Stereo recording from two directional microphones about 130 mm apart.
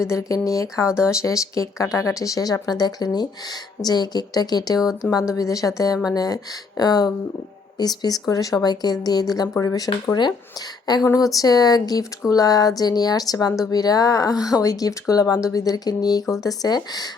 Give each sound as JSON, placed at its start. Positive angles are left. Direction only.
{"t": 0.0, "sound": "speech", "side_deg": 25}